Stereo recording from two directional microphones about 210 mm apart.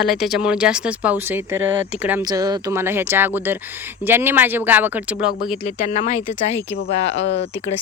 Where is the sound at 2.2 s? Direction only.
20° right (ahead or behind).